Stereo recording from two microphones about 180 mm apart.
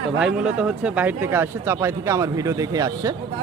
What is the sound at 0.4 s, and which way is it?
Speech, 5° right (ahead or behind).